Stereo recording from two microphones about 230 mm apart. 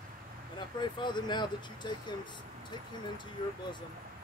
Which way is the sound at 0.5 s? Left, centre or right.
Centre.